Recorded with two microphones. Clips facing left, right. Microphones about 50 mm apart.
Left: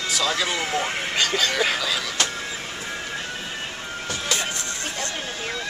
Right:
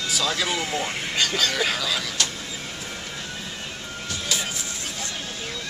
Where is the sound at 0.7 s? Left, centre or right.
Left.